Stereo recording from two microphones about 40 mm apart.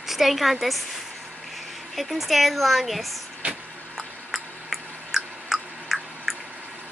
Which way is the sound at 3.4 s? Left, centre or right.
Right.